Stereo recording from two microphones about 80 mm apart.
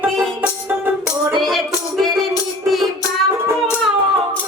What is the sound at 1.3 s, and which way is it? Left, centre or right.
Music, centre.